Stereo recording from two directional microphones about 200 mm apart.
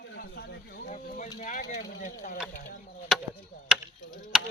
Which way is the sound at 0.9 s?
35° left (ahead or behind).